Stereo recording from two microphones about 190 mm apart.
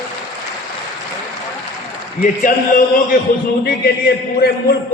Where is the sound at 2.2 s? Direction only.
45° left (ahead or behind).